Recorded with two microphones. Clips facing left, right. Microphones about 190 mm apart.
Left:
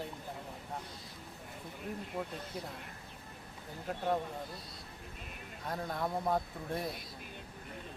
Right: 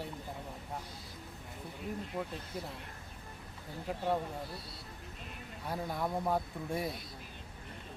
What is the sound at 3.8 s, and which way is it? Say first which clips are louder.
Speech: even; 5° right (ahead or behind).